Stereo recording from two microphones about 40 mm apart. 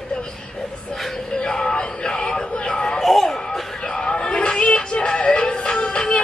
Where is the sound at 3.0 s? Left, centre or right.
Centre.